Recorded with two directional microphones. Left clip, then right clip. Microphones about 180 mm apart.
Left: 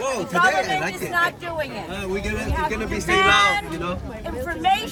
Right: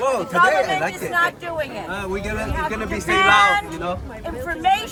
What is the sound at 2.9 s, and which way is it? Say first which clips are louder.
Speech: right 2 dB; 50° right (ahead or behind).